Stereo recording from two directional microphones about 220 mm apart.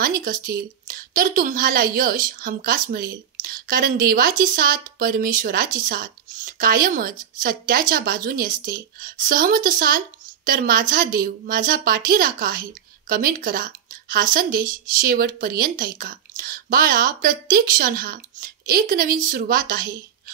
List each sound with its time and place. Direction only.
0.0 s a woman's voice: 40° right (ahead or behind)